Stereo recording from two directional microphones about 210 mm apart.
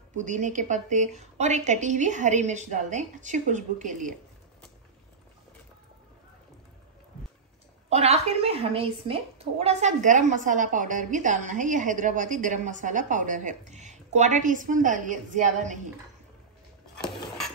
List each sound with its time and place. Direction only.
0.1 s a woman's voice: 35° right (ahead or behind)
7.9 s a woman's voice: 30° right (ahead or behind)
16.9 s dishes: 5° left (ahead or behind)